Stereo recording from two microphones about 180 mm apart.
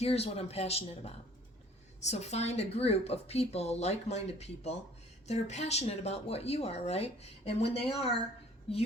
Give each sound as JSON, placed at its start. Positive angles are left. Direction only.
{"t": 0.0, "sound": "speech", "side_deg": 35}